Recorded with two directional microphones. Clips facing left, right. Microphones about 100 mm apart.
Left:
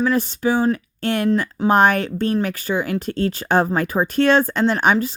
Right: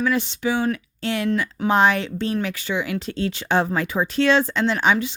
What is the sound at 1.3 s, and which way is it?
Speech, 35° left (ahead or behind).